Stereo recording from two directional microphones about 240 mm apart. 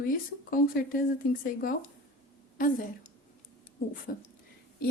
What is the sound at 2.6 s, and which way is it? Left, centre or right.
Speech, left.